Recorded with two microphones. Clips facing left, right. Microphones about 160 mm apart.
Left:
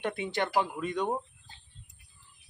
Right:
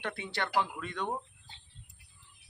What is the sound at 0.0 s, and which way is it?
Speech, 20° left (ahead or behind).